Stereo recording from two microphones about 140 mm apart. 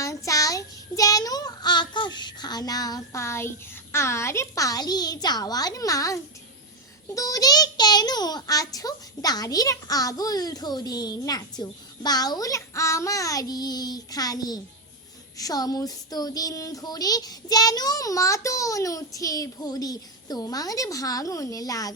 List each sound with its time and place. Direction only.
0.0 s child singing: 20° left (ahead or behind)
3.9 s a child's voice: 20° left (ahead or behind)